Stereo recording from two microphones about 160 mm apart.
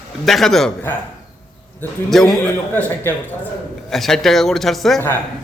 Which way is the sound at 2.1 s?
Centre (ahead or behind).